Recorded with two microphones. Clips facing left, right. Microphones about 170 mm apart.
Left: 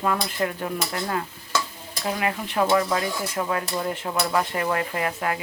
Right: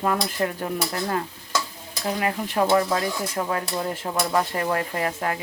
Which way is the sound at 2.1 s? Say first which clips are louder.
Right 1 dB; 40° right (ahead or behind).